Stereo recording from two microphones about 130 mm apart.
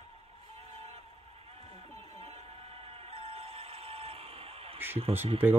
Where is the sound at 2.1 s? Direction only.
50° right (ahead or behind).